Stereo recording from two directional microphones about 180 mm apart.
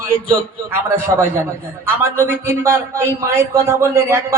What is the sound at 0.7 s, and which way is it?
A man's voice, 15° right (ahead or behind).